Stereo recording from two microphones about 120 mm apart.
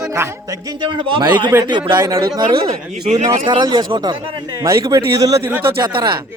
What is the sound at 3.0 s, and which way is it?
Speech, 80° right.